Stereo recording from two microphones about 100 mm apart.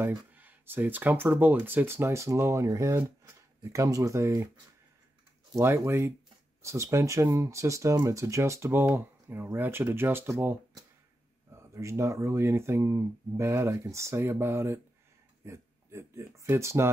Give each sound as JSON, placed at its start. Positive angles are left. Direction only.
{"t": 0.1, "sound": "speech", "side_deg": -15}
{"t": 5.6, "sound": "speech", "side_deg": -30}